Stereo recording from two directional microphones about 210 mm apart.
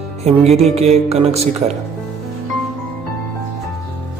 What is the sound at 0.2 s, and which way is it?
Music, 30° right (ahead or behind).